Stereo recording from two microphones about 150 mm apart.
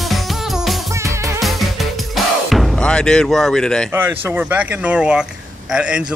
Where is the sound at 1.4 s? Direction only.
Centre (ahead or behind).